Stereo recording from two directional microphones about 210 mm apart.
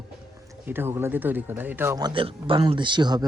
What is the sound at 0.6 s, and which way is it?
A man's voice, 10° right (ahead or behind).